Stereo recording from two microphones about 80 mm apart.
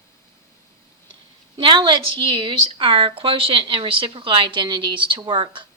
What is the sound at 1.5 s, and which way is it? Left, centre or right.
A woman's voice, right.